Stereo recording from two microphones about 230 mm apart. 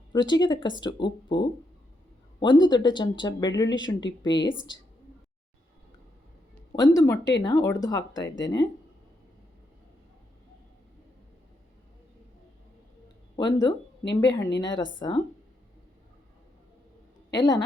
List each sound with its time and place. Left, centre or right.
0.1 s speech: centre
6.7 s a woman's voice: centre
13.3 s a woman's voice: centre
17.3 s a woman's voice: centre